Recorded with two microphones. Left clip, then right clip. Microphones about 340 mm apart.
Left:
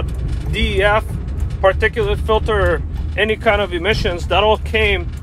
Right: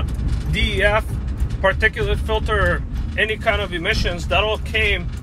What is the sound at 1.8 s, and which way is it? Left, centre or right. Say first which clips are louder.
Speech: left 2 dB; left.